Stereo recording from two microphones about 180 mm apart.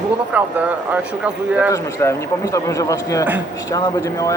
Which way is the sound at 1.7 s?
15° left (ahead or behind).